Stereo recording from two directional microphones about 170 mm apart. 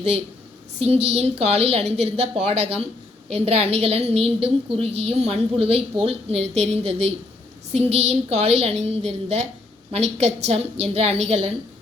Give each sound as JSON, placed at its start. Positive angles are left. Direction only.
{"t": 0.8, "sound": "a woman's voice", "side_deg": -40}